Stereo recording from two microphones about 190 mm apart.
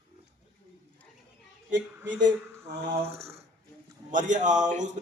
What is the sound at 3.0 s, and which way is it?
A man's voice, 35° right (ahead or behind).